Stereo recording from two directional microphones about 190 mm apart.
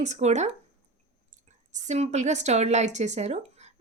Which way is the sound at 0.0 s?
35° right (ahead or behind).